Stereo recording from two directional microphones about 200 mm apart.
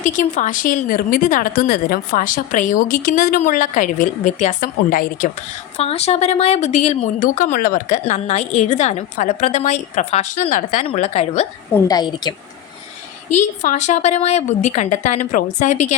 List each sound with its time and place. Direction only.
0.0 s speech: 40° left (ahead or behind)
5.7 s a woman's voice: 30° left (ahead or behind)
11.9 s a woman's voice: 20° left (ahead or behind)
13.6 s a woman's voice: 40° left (ahead or behind)